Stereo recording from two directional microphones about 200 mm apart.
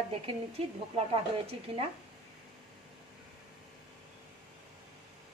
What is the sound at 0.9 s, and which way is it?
Speech, 30° right (ahead or behind).